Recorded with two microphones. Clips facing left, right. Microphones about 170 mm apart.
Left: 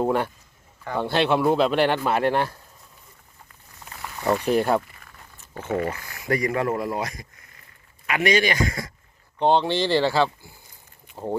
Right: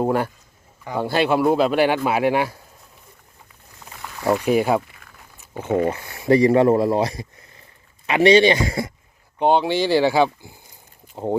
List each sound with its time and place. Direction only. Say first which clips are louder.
0.0 s speech: right 2 dB; 5° right (ahead or behind)
4.2 s a sound: right 3 dB; 10° right (ahead or behind)
5.5 s speech: right 5 dB; 15° right (ahead or behind)
9.4 s speech: right 2 dB; 10° right (ahead or behind)